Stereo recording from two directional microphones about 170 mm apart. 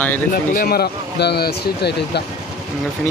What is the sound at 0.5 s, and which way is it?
Speech, 65° left (ahead or behind).